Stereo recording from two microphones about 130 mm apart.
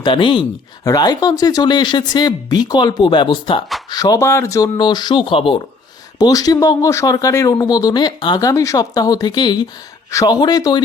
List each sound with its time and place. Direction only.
0.0 s speech: 40° left (ahead or behind)
0.9 s speech: 30° left (ahead or behind)
4.8 s speech: 35° left (ahead or behind)
6.1 s speech: 30° left (ahead or behind)